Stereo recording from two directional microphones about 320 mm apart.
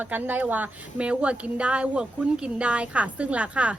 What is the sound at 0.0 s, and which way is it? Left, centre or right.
Speech, centre.